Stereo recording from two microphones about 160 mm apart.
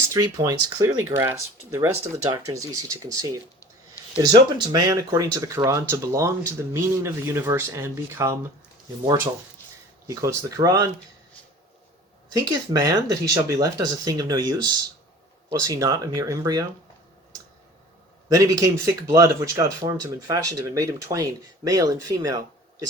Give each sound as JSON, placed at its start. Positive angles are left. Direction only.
{"t": 0.1, "sound": "speech", "side_deg": -20}
{"t": 10.1, "sound": "speech", "side_deg": -20}
{"t": 12.3, "sound": "speech", "side_deg": -25}
{"t": 18.3, "sound": "speech", "side_deg": -20}